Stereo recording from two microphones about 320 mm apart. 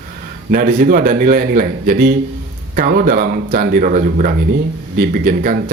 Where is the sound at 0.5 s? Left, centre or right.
Right.